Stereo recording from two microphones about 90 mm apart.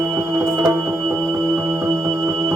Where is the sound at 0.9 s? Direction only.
5° left (ahead or behind).